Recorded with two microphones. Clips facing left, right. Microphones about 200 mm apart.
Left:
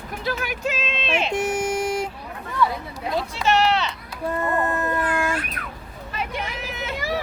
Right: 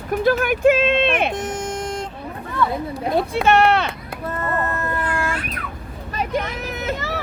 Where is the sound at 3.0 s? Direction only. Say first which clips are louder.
Right 5 dB; 55° right (ahead or behind).